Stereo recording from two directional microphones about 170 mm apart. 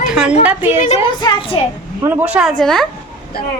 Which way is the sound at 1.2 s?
30° left (ahead or behind).